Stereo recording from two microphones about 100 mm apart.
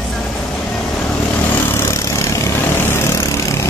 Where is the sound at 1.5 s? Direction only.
25° left (ahead or behind).